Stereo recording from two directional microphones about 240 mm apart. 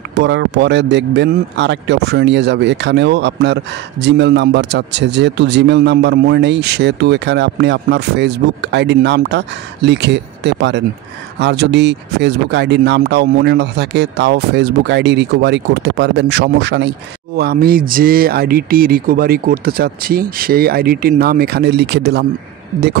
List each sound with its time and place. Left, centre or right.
0.1 s speech: right